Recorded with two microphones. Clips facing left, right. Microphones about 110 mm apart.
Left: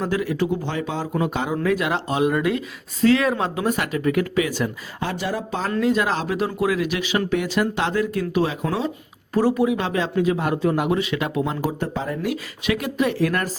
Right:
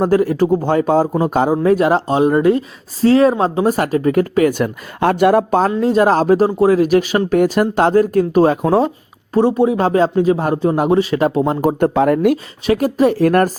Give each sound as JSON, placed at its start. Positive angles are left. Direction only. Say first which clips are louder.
{"t": 0.0, "sound": "speech", "louder": "right 9 dB", "side_deg": -45}
{"t": 5.8, "sound": "speech", "louder": "right 5 dB", "side_deg": -40}
{"t": 9.3, "sound": "speech", "louder": "right 5 dB", "side_deg": -30}
{"t": 11.9, "sound": "speech", "louder": "right 13 dB", "side_deg": -65}
{"t": 12.3, "sound": "speech", "louder": "right 8 dB", "side_deg": -40}